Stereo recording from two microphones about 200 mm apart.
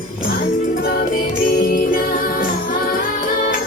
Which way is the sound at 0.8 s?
50° left (ahead or behind).